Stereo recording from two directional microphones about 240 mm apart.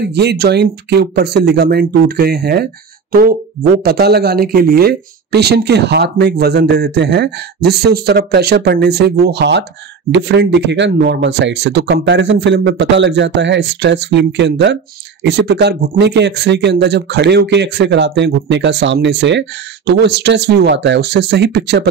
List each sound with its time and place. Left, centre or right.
0.0 s speech: right